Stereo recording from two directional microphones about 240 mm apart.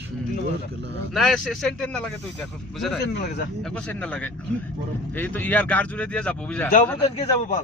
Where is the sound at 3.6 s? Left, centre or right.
Centre.